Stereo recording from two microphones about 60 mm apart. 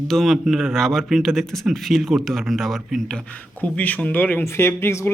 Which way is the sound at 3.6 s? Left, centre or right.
Left.